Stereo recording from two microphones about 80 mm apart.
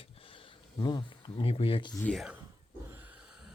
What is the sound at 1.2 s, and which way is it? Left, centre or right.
Speech, left.